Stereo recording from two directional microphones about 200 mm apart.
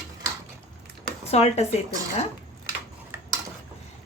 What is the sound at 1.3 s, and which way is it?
Speech, 35° left (ahead or behind).